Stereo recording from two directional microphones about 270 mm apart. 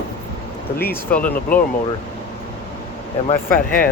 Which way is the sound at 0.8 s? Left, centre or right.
Centre.